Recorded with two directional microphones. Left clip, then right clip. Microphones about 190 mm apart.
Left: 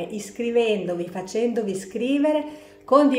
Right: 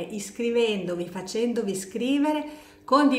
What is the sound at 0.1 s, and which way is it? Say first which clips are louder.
Speech: left 2 dB; 15° right (ahead or behind).